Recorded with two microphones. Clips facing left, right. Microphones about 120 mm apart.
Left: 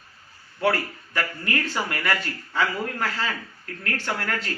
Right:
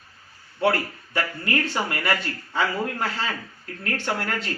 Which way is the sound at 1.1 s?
25° right (ahead or behind).